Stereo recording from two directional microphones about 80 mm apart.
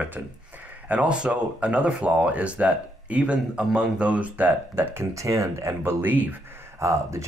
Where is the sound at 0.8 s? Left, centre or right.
Centre.